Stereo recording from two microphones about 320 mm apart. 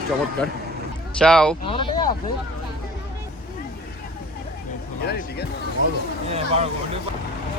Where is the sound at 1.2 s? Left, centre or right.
Centre.